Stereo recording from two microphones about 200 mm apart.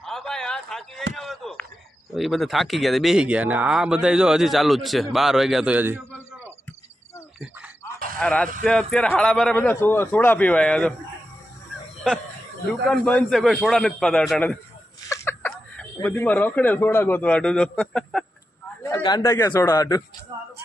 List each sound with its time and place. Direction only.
0.0 s a sound: centre (ahead or behind)
1.1 s speech: centre (ahead or behind)
8.2 s speech: 5° left (ahead or behind)
12.9 s speech: 5° left (ahead or behind)
18.8 s a man's voice: 15° left (ahead or behind)